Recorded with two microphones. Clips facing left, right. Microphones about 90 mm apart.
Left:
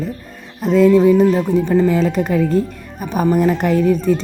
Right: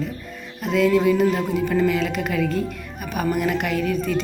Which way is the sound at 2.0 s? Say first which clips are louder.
Left 6 dB; 35° left (ahead or behind).